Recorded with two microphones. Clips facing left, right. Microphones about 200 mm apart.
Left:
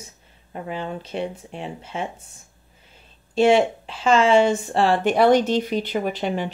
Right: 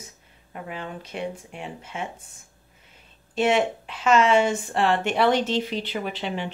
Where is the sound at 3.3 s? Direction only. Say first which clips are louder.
Left 5 dB; 30° left (ahead or behind).